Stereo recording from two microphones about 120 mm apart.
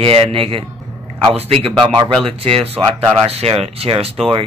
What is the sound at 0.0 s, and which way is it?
A man's voice, 50° right (ahead or behind).